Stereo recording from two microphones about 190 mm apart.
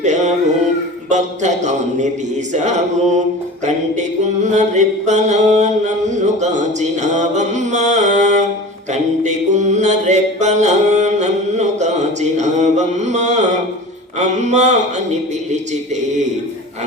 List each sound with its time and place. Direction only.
0.0 s music: 40° right (ahead or behind)
1.1 s mantra: 40° right (ahead or behind)
4.4 s mantra: 40° right (ahead or behind)
8.9 s music: 40° right (ahead or behind)
14.2 s mantra: 40° right (ahead or behind)